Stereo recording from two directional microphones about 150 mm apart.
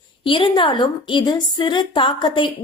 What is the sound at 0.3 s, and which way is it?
A woman's voice, 35° left (ahead or behind).